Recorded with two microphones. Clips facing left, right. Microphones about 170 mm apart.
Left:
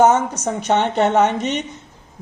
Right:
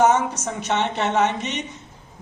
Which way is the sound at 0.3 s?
55° left (ahead or behind).